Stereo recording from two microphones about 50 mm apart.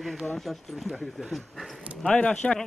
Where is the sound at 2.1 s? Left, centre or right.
Left.